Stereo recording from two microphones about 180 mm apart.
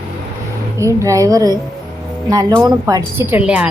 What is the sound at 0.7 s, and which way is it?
A woman's voice, 15° right (ahead or behind).